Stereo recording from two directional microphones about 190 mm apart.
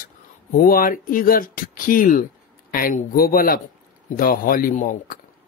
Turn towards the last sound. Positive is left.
turn(degrees=45)  # may be behind; listen again after turning